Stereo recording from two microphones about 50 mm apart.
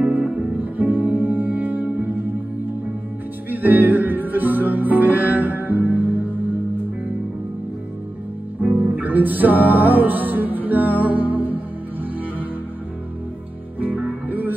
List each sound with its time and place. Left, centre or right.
0.0 s music: right
3.4 s music: right
8.5 s music: right
13.7 s music: right